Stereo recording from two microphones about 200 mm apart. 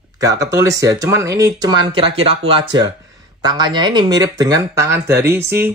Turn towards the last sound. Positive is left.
turn(degrees=-10)  # may be behind; listen again after turning